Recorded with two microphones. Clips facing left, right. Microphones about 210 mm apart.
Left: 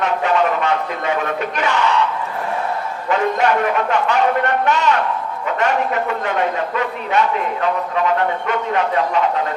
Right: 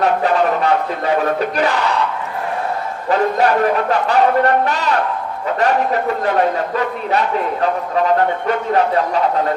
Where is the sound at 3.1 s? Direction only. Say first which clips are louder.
Right 2 dB; 35° right (ahead or behind).